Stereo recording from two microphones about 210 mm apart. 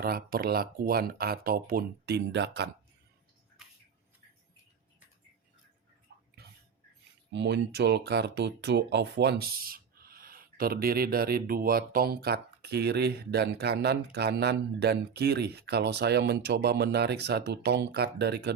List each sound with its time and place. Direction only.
0.0 s speech: 45° right (ahead or behind)
7.3 s speech: 55° right (ahead or behind)